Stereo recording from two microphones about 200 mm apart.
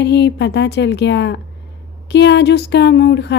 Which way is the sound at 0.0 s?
60° left (ahead or behind).